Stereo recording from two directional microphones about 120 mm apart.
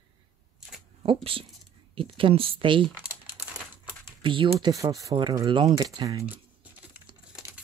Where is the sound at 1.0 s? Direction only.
50° right (ahead or behind).